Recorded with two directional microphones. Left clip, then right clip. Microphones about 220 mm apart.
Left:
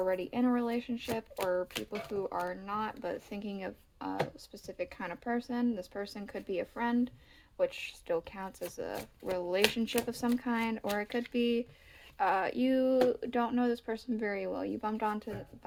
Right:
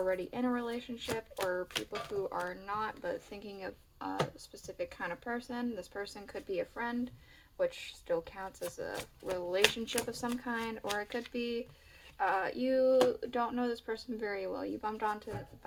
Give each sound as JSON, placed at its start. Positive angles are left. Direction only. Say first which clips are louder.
{"t": 0.0, "sound": "speech", "louder": "left 2 dB", "side_deg": 30}
{"t": 2.1, "sound": "speech", "louder": "left 2 dB", "side_deg": 30}